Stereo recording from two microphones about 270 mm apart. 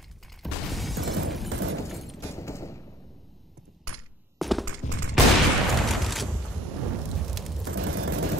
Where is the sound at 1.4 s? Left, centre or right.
Right.